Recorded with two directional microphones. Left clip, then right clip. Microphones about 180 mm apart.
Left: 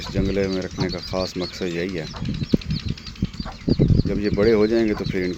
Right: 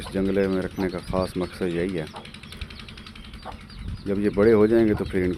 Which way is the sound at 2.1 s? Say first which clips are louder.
Left 13 dB; 45° right (ahead or behind).